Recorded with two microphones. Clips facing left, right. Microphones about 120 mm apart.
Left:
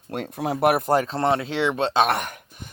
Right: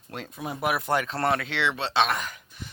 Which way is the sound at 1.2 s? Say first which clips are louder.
Left 4 dB; 25° left (ahead or behind).